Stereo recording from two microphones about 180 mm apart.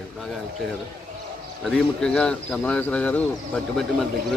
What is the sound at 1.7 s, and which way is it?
Speech, 5° left (ahead or behind).